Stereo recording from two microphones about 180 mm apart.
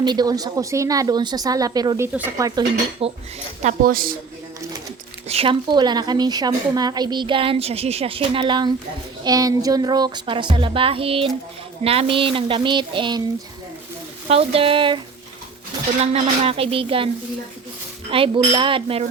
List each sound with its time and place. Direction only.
0.0 s a woman's voice: 25° right (ahead or behind)
2.4 s cutlery: 20° right (ahead or behind)
3.0 s speech: 35° right (ahead or behind)
3.6 s a woman's voice: 45° right (ahead or behind)
5.3 s a woman's voice: 30° right (ahead or behind)
14.3 s a woman's voice: 35° right (ahead or behind)
18.1 s a woman's voice: 30° right (ahead or behind)